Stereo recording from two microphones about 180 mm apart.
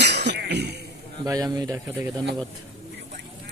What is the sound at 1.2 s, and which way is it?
Speech, 20° right (ahead or behind).